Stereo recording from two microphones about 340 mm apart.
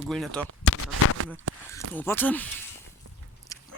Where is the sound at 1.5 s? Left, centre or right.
Right.